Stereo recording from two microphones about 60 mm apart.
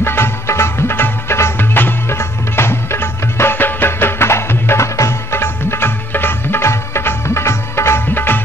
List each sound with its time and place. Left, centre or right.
0.0 s music: left